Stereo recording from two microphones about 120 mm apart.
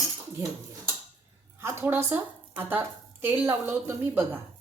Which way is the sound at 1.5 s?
20° right (ahead or behind).